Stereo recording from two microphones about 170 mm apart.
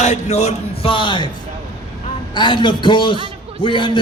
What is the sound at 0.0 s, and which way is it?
Speech, 45° left (ahead or behind).